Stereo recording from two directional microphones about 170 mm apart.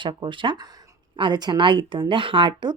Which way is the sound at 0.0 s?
30° right (ahead or behind).